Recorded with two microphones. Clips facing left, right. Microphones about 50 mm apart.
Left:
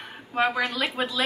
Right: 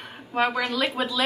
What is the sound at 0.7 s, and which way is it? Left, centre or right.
Speech, centre.